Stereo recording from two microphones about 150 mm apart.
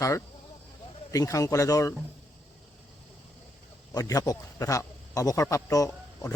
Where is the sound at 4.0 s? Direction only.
20° left (ahead or behind).